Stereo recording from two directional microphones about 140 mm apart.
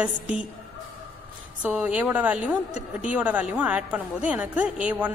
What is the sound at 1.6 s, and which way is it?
A woman's voice, 10° right (ahead or behind).